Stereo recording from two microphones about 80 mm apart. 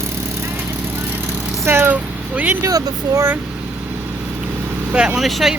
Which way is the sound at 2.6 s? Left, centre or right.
Right.